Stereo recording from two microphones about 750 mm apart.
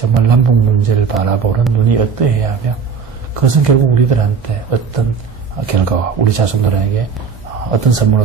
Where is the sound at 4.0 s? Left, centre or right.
Right.